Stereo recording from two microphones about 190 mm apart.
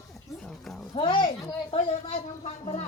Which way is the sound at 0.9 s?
25° left (ahead or behind).